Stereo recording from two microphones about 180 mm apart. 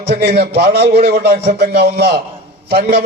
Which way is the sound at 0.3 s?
65° right (ahead or behind).